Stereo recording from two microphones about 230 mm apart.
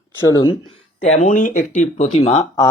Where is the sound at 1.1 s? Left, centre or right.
Left.